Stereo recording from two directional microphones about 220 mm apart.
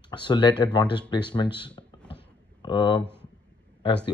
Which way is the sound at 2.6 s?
20° left (ahead or behind).